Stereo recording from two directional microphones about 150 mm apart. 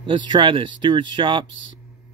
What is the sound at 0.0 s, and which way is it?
Speech, 30° right (ahead or behind).